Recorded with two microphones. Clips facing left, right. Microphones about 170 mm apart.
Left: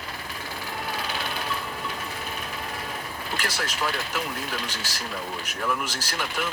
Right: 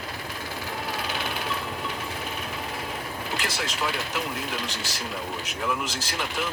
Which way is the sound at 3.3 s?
20° right (ahead or behind).